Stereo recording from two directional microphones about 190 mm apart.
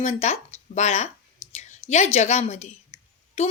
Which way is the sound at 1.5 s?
35° left (ahead or behind).